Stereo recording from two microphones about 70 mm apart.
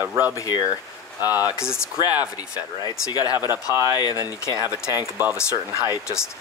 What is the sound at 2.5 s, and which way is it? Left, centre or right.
Speech, left.